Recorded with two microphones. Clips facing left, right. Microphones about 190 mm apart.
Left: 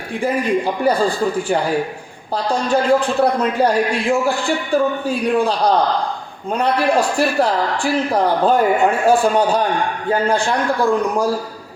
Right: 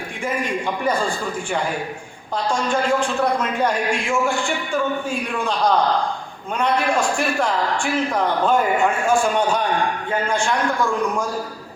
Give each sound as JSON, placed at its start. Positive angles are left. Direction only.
{"t": 0.2, "sound": "a man's voice", "side_deg": 35}
{"t": 2.3, "sound": "a man's voice", "side_deg": 35}